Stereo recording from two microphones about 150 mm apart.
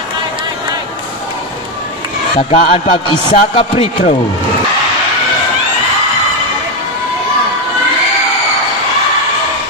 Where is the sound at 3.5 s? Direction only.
40° left (ahead or behind).